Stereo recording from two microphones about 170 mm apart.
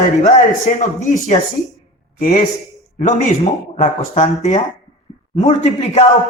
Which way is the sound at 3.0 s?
45° left (ahead or behind).